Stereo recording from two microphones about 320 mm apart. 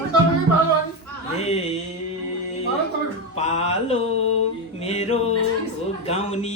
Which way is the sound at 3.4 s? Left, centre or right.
Centre.